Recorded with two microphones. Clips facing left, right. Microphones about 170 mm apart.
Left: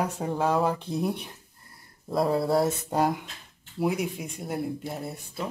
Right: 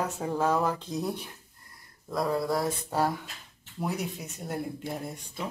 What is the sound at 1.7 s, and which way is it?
Speech, 30° left (ahead or behind).